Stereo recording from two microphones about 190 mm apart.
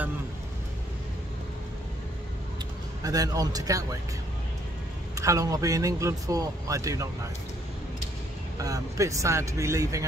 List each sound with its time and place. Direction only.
3.0 s speech: 20° right (ahead or behind)
5.1 s speech: 15° right (ahead or behind)
8.5 s speech: 20° right (ahead or behind)